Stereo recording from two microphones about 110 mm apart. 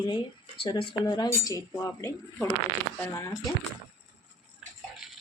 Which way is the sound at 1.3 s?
30° left (ahead or behind).